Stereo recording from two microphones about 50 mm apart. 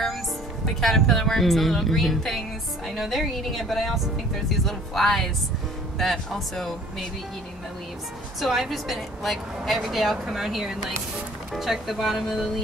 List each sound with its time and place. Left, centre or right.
0.7 s a woman's voice: centre
8.4 s a woman's voice: centre